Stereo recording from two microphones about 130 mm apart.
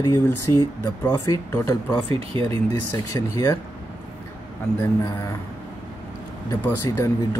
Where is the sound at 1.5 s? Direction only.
15° left (ahead or behind).